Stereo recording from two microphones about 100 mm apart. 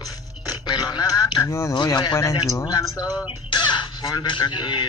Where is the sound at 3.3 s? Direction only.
50° left (ahead or behind).